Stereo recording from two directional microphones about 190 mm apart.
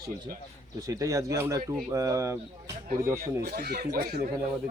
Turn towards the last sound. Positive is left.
turn(degrees=-55)  # may be behind; listen again after turning